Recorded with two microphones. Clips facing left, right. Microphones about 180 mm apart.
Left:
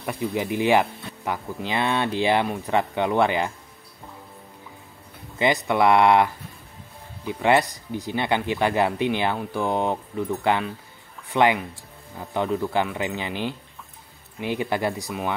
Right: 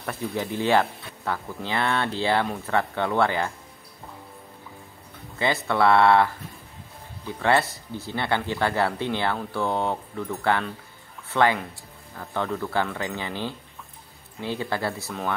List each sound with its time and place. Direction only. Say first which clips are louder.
0.0 s speech: left 3 dB; 15° left (ahead or behind)
5.4 s speech: left 2 dB; 15° left (ahead or behind)